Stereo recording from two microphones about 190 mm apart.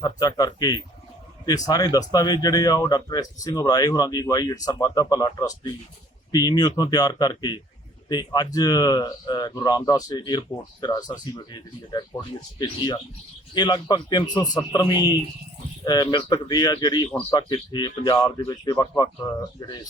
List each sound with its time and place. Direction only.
0.0 s speech: 20° left (ahead or behind)